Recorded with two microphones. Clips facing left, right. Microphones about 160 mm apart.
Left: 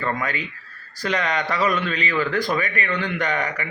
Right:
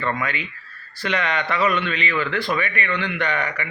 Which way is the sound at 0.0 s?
40° left (ahead or behind).